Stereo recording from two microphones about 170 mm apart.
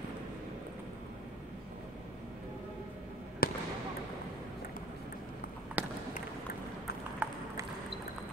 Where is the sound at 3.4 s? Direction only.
60° left (ahead or behind).